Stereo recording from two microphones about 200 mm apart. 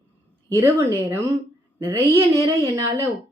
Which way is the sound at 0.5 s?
10° right (ahead or behind).